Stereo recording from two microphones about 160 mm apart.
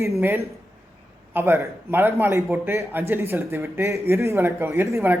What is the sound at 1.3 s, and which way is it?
A man's voice, 15° right (ahead or behind).